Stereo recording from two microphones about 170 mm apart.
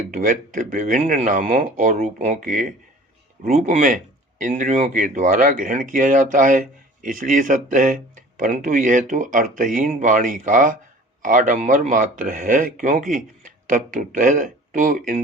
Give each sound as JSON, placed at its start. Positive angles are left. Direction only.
{"t": 0.1, "sound": "speech", "side_deg": -50}